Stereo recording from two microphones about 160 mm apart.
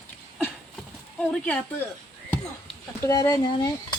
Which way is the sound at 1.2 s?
10° left (ahead or behind).